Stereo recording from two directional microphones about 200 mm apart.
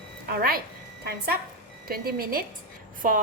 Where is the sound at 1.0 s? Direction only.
50° right (ahead or behind).